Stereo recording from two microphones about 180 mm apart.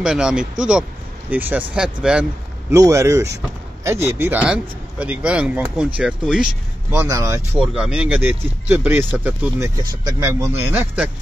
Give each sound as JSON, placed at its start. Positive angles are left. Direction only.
{"t": 0.0, "sound": "speech", "side_deg": -5}
{"t": 2.7, "sound": "speech", "side_deg": -15}
{"t": 7.5, "sound": "speech", "side_deg": -5}